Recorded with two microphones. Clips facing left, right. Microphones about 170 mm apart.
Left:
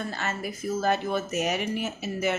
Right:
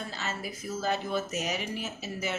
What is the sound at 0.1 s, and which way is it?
Speech, 55° left (ahead or behind).